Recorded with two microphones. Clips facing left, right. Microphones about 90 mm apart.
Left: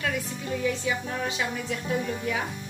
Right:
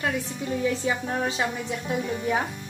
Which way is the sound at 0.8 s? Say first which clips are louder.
Right 3 dB; 30° right (ahead or behind).